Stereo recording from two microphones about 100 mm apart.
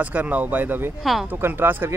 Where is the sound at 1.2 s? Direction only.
20° right (ahead or behind).